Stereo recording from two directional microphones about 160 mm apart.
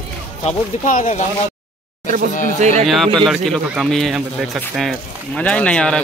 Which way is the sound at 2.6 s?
45° right (ahead or behind).